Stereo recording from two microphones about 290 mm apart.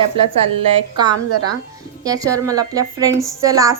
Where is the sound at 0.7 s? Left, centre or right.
Centre.